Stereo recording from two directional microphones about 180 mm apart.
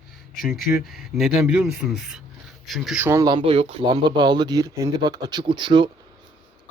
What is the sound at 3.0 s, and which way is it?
Speech, 20° right (ahead or behind).